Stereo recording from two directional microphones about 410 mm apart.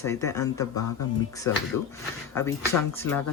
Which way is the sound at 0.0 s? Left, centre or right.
Centre.